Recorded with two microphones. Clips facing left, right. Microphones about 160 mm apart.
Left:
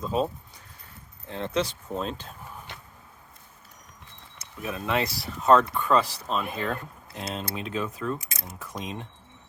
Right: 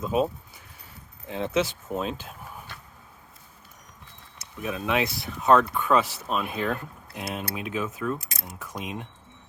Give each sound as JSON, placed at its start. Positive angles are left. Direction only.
{"t": 0.0, "sound": "speech", "side_deg": -5}
{"t": 1.3, "sound": "speech", "side_deg": -5}
{"t": 2.7, "sound": "a sound", "side_deg": 20}
{"t": 4.6, "sound": "speech", "side_deg": 0}